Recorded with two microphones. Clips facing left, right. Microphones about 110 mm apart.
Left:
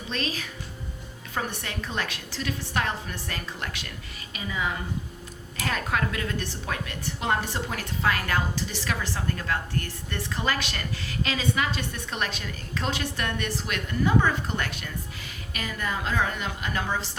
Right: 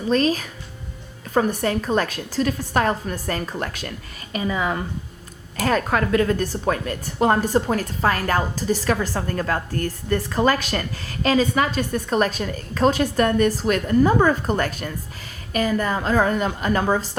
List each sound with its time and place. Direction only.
0.1 s a woman's voice: 40° right (ahead or behind)